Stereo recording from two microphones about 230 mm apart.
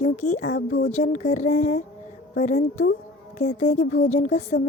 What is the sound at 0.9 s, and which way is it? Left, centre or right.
Speech, left.